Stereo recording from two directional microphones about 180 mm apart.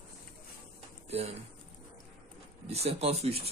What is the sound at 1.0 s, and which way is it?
Speech, 35° right (ahead or behind).